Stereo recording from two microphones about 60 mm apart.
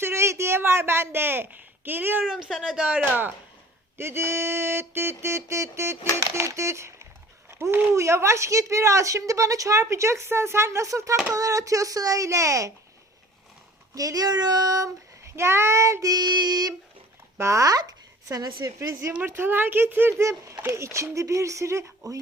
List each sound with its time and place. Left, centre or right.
0.0 s a sound: right
2.5 s speech: centre
2.7 s speech: centre
3.9 s a sound: right
7.7 s speech: right
7.9 s speech: right
13.9 s speech: right
15.4 s a sound: right
17.3 s speech: right
19.3 s speech: right
20.2 s speech: right